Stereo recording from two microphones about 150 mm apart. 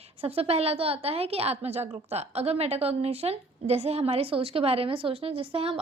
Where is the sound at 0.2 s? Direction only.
40° right (ahead or behind).